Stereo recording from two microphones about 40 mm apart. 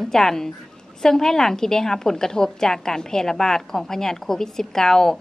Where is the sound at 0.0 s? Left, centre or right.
Centre.